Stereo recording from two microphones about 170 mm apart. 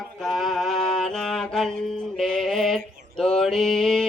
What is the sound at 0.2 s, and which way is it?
Music, centre (ahead or behind).